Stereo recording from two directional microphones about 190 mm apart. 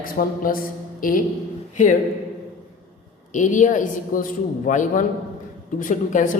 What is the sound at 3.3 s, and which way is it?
Speech, 40° left (ahead or behind).